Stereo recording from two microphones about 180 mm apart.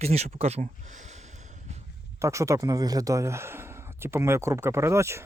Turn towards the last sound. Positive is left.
turn(degrees=-15)  # may be behind; listen again after turning